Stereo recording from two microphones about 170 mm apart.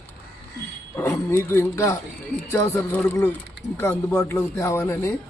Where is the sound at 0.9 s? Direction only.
15° left (ahead or behind).